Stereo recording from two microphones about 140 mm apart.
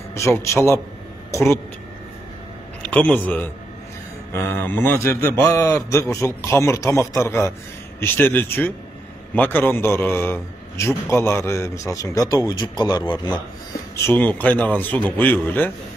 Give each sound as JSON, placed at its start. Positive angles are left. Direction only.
{"t": 0.1, "sound": "a man's voice", "side_deg": 20}
{"t": 2.9, "sound": "a man's voice", "side_deg": 10}
{"t": 14.0, "sound": "speech", "side_deg": 10}